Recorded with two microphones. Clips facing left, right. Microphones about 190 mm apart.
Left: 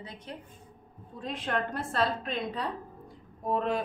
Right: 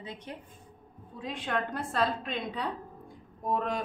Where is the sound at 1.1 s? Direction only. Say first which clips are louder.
Left 1 dB; centre (ahead or behind).